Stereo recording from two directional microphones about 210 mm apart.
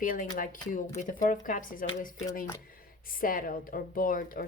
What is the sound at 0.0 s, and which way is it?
Speech, 40° left (ahead or behind).